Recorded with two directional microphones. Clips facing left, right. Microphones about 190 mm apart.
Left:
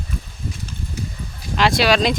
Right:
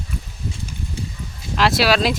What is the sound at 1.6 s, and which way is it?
Speech, 5° right (ahead or behind).